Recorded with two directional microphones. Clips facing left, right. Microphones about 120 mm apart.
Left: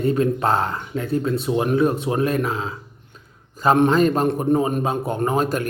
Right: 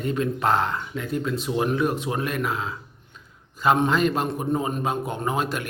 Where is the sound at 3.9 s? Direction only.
40° left (ahead or behind).